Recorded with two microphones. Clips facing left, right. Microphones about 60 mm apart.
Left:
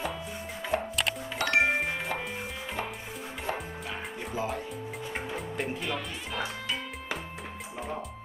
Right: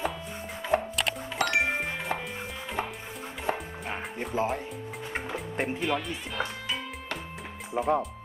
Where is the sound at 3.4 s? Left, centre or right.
Right.